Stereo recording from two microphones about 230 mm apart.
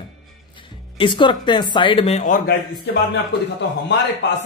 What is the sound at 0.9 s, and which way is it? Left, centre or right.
Speech, left.